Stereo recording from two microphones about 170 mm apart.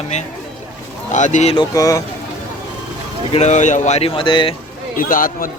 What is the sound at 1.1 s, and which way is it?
Speech, 45° left (ahead or behind).